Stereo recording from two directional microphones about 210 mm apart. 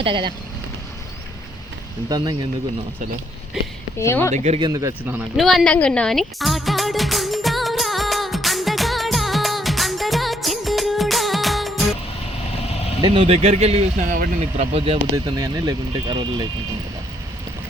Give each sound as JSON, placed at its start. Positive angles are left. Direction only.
{"t": 0.0, "sound": "speech", "side_deg": -25}
{"t": 2.0, "sound": "speech", "side_deg": -20}
{"t": 3.6, "sound": "speech", "side_deg": 0}
{"t": 3.9, "sound": "speech", "side_deg": 10}
{"t": 4.4, "sound": "speech", "side_deg": -30}
{"t": 4.7, "sound": "a sound", "side_deg": -15}
{"t": 13.0, "sound": "speech", "side_deg": -25}
{"t": 14.1, "sound": "speech", "side_deg": -40}
{"t": 14.7, "sound": "speech", "side_deg": -25}